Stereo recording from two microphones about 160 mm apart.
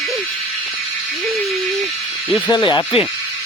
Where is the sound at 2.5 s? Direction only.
30° left (ahead or behind).